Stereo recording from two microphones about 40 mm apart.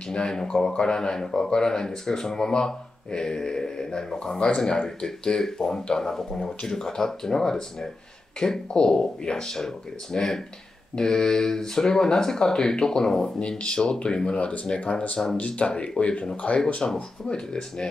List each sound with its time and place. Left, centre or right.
0.1 s speech: centre